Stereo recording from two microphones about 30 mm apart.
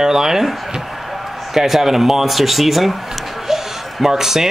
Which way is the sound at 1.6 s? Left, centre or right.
Centre.